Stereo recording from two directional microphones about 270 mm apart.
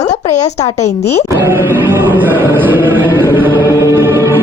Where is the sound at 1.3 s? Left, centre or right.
Centre.